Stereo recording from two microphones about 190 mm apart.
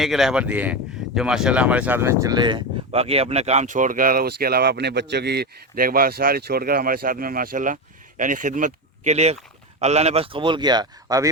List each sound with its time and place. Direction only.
0.0 s a man's voice: centre (ahead or behind); by 11.3 s 20° right (ahead or behind)